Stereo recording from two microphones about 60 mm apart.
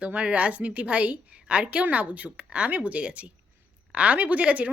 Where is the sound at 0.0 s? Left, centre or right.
Right.